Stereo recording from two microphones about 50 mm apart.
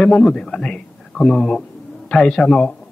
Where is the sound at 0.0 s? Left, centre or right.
Centre.